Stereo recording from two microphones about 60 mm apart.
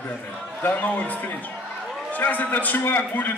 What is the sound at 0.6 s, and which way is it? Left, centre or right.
A man's voice, left.